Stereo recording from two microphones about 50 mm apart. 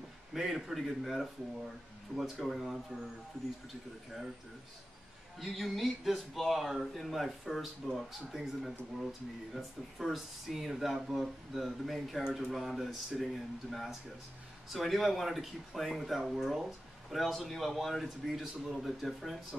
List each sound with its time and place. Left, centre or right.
0.3 s speech: centre
5.4 s speech: centre
12.2 s speech: centre
12.4 s speech: centre